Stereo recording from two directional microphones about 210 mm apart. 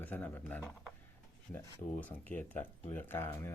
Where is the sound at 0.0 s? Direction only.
10° left (ahead or behind).